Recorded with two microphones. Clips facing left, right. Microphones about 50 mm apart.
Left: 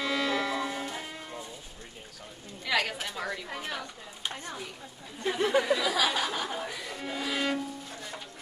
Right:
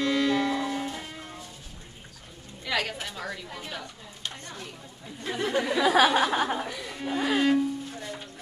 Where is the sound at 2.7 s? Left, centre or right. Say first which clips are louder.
Even; centre.